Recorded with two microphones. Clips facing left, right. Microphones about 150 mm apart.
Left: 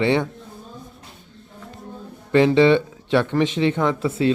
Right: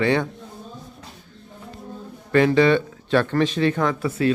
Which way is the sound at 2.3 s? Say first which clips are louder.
Left 2 dB; 25° left (ahead or behind).